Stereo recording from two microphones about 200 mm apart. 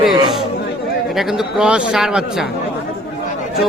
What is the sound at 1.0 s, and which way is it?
Speech, centre (ahead or behind).